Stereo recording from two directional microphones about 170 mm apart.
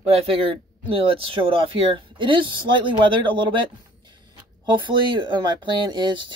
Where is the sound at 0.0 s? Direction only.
35° right (ahead or behind).